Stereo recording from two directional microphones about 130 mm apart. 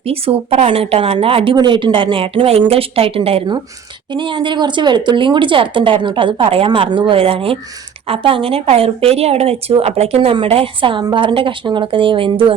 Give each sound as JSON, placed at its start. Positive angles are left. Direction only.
{"t": 0.0, "sound": "a woman's voice", "side_deg": -50}